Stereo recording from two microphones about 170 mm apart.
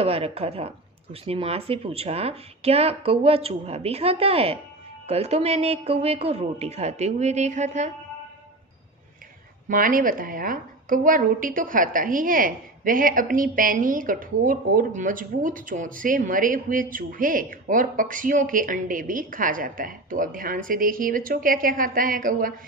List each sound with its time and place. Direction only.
0.0 s speech: 35° right (ahead or behind)
9.7 s a woman's voice: 55° right (ahead or behind)